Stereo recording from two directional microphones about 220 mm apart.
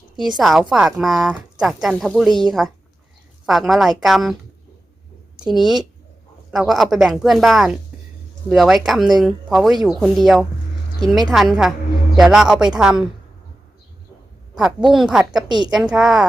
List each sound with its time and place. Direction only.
0.2 s speech: centre (ahead or behind)
5.5 s speech: centre (ahead or behind)
14.5 s a woman's voice: centre (ahead or behind)
15.4 s a woman's voice: 20° right (ahead or behind)
15.7 s speech: centre (ahead or behind)